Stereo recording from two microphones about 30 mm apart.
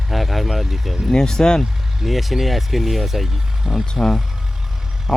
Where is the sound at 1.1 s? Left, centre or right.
Centre.